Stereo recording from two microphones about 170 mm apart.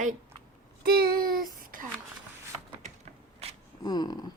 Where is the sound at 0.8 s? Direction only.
60° right (ahead or behind).